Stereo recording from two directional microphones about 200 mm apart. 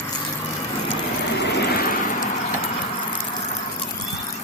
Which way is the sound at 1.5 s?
45° left (ahead or behind).